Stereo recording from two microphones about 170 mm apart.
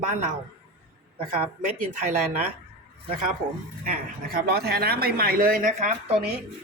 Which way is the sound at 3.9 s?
65° right (ahead or behind).